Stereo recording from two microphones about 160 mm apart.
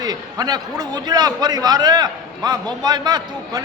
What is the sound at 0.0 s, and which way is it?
A man's voice, 25° right (ahead or behind).